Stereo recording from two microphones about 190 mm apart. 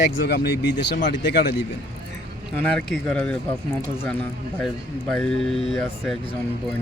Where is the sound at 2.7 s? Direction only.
5° left (ahead or behind).